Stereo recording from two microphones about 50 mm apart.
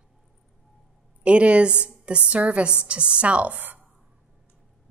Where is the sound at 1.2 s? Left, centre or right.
Right.